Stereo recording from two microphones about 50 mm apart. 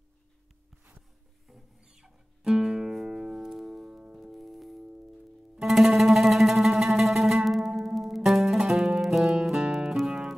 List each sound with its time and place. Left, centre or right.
1.9 s music: centre
3.9 s music: centre
4.2 s music: centre